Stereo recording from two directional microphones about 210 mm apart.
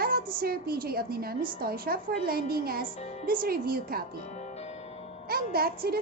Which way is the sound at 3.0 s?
30° left (ahead or behind).